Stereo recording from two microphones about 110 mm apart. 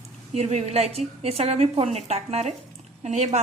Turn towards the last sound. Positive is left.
turn(degrees=-90)